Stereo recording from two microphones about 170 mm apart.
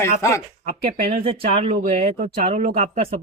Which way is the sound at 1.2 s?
35° right (ahead or behind).